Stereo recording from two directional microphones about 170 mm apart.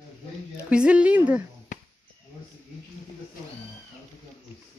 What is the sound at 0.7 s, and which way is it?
Speech, 5° right (ahead or behind).